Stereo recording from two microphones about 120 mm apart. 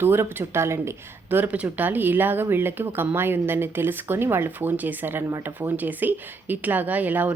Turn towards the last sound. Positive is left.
turn(degrees=-15)  # may be behind; listen again after turning